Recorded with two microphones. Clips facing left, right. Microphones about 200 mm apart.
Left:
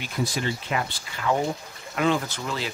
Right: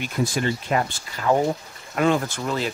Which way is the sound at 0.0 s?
50° right (ahead or behind).